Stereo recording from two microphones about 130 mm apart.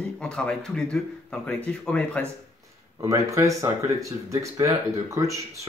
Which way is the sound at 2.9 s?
25° right (ahead or behind).